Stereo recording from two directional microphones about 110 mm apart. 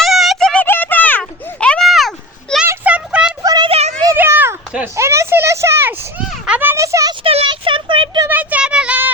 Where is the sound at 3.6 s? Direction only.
70° right (ahead or behind).